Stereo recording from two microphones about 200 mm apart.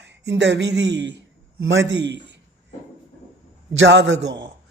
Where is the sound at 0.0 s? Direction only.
60° right (ahead or behind).